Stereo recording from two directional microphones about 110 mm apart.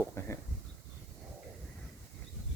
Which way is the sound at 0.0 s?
25° left (ahead or behind).